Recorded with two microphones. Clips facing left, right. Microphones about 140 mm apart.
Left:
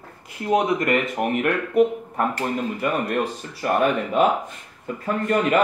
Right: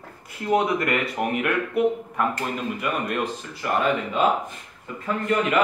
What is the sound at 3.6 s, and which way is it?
Speech, 50° left (ahead or behind).